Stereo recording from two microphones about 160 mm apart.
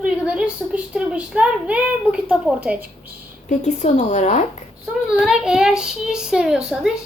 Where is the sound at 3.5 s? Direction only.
45° left (ahead or behind).